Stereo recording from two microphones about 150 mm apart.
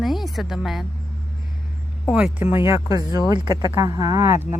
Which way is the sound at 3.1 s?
25° right (ahead or behind).